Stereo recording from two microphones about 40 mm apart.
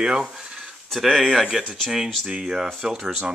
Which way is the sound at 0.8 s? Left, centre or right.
Centre.